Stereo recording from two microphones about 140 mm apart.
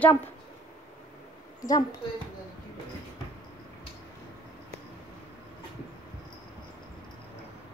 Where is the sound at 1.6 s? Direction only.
25° left (ahead or behind).